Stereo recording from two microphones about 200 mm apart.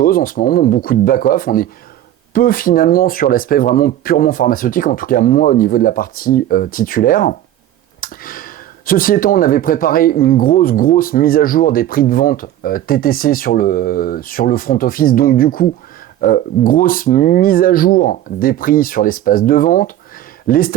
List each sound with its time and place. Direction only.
0.0 s speech: 45° left (ahead or behind)